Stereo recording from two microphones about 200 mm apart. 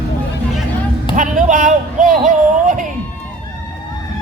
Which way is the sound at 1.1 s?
40° right (ahead or behind).